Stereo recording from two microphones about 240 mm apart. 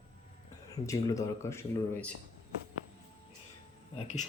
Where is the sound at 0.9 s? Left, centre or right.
Centre.